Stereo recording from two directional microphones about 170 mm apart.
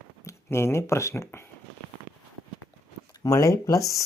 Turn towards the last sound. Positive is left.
turn(degrees=20)  # may be behind; listen again after turning